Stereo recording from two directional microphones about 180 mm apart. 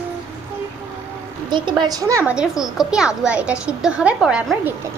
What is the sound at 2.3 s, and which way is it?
A woman's voice, 5° right (ahead or behind).